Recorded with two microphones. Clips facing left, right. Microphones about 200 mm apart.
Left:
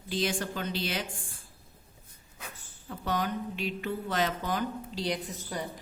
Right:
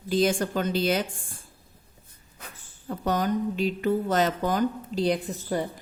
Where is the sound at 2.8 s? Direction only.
45° right (ahead or behind).